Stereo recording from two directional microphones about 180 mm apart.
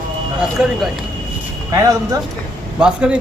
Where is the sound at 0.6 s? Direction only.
5° right (ahead or behind).